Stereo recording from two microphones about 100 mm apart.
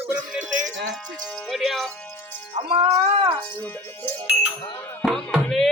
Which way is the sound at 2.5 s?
70° right (ahead or behind).